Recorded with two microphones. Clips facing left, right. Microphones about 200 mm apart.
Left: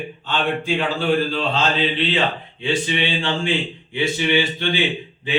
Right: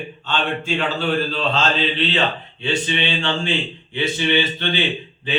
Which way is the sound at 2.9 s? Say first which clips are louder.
Even; 15° left (ahead or behind).